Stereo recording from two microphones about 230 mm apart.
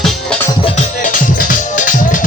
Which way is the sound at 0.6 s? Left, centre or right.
Left.